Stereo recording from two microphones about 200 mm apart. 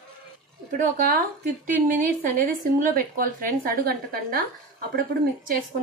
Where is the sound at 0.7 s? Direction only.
45° right (ahead or behind).